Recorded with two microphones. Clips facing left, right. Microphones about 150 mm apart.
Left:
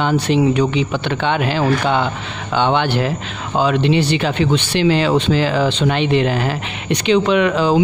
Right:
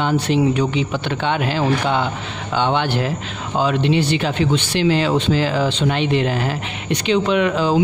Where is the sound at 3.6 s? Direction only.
85° left.